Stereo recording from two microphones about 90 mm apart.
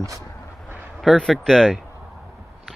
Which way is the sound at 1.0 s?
Centre (ahead or behind).